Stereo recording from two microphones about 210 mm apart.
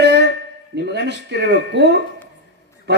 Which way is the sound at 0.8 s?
55° right (ahead or behind).